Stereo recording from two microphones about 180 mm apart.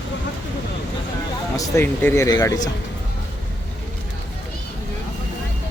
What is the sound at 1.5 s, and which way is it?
Speech, 15° left (ahead or behind).